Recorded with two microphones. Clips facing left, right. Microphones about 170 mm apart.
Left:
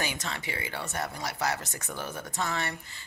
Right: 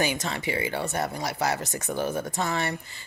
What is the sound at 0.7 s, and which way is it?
Speech, 30° right (ahead or behind).